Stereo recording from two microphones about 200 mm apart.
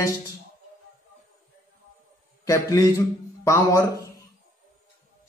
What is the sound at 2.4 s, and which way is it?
A man's voice, 15° left (ahead or behind).